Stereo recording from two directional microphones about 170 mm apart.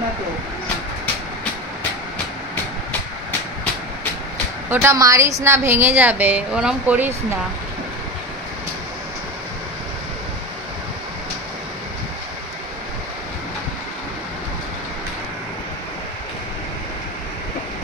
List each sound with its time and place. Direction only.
4.6 s a woman's voice: 15° right (ahead or behind)